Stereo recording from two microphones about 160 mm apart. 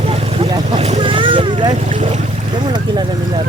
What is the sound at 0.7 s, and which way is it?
Boat, 40° right (ahead or behind).